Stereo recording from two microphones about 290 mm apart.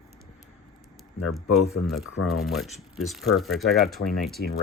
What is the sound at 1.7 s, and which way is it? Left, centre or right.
Speech, left.